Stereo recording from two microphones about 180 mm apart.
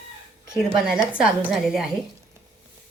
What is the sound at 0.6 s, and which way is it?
Speech, 5° right (ahead or behind).